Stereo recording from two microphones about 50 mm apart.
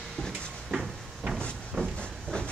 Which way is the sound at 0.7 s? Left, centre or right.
Centre.